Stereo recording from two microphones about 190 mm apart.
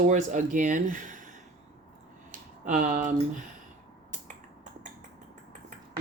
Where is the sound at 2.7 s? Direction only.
45° right (ahead or behind).